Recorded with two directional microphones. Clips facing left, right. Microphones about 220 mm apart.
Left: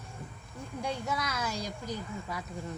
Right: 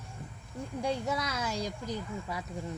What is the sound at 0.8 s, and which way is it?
Speech, 35° right (ahead or behind).